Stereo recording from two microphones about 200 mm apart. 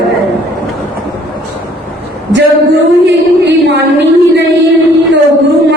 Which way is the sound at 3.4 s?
60° right (ahead or behind).